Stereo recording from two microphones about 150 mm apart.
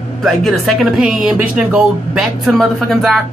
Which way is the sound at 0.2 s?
Centre (ahead or behind).